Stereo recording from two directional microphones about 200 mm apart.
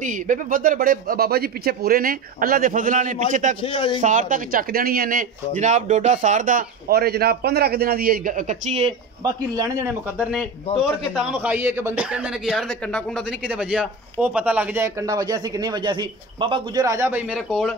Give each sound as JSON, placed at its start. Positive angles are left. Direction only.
{"t": 0.0, "sound": "a man's voice", "side_deg": -40}
{"t": 3.6, "sound": "a man's voice", "side_deg": 25}
{"t": 4.0, "sound": "a man's voice", "side_deg": -40}
{"t": 9.6, "sound": "a man's voice", "side_deg": -15}
{"t": 17.3, "sound": "a man's voice", "side_deg": 0}